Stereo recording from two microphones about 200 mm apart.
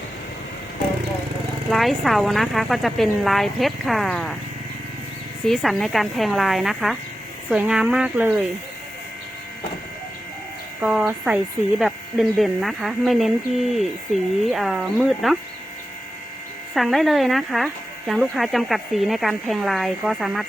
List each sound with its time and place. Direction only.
1.7 s speech: centre (ahead or behind)
5.5 s speech: centre (ahead or behind)
10.8 s speech: 5° right (ahead or behind)
16.7 s speech: centre (ahead or behind)